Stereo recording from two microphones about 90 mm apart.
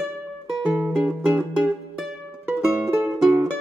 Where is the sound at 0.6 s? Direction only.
5° left (ahead or behind).